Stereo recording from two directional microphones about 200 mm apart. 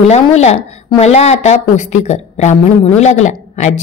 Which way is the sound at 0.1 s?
35° left (ahead or behind).